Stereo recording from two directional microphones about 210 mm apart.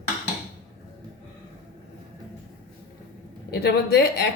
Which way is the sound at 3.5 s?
50° left (ahead or behind).